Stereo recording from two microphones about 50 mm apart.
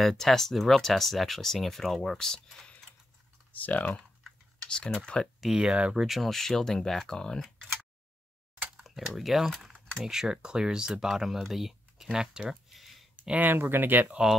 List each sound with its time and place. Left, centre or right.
0.0 s speech: centre
3.5 s speech: left
4.6 s speech: centre
5.6 s speech: right
5.9 s speech: centre
6.3 s speech: centre
8.8 s speech: centre
10.0 s speech: centre
12.6 s a sound: centre
13.4 s speech: right